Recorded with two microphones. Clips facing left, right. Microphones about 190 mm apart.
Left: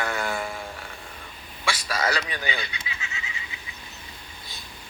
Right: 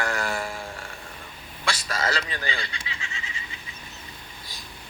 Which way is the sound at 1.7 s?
15° left (ahead or behind).